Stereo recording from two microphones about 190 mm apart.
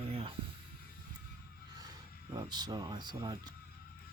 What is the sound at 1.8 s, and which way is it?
Speech, 20° right (ahead or behind).